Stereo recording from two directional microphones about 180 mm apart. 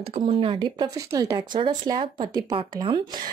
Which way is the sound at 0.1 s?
30° right (ahead or behind).